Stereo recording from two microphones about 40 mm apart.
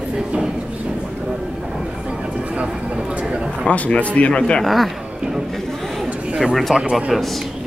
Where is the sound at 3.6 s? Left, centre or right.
Left.